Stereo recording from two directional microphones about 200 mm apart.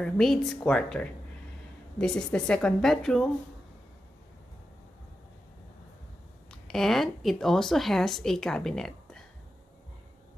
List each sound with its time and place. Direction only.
0.0 s speech: centre (ahead or behind)
6.7 s speech: centre (ahead or behind)